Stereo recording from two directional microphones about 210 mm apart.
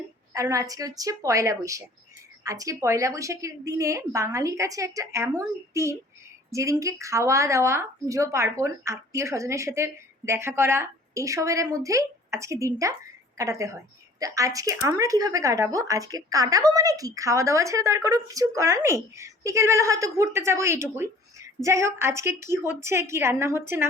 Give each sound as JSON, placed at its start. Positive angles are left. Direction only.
{"t": 0.3, "sound": "a woman's voice", "side_deg": -15}